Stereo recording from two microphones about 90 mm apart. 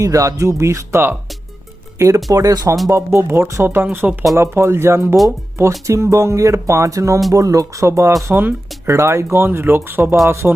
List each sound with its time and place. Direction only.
0.0 s speech: 40° right (ahead or behind)
2.9 s speech: 25° right (ahead or behind)